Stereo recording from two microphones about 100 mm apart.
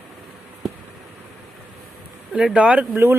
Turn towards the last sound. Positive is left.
turn(degrees=-20)  # may be behind; listen again after turning